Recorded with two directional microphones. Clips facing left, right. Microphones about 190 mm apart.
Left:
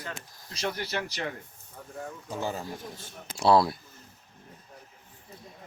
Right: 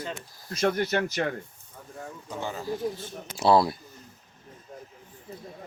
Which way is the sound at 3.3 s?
Centre (ahead or behind).